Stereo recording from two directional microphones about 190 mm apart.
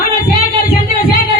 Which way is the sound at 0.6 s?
50° left (ahead or behind).